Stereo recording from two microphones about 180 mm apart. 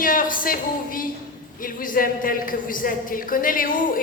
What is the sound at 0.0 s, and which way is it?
Music, 50° left (ahead or behind).